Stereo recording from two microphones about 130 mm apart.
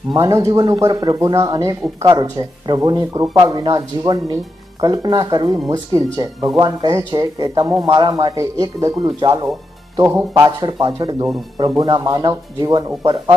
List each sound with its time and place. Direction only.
0.1 s speech: 25° right (ahead or behind)